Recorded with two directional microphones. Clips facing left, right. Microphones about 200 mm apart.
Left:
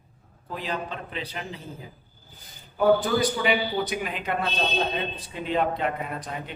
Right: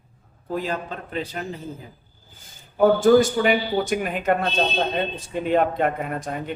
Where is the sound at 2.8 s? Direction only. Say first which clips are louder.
Right 6 dB; 45° right (ahead or behind).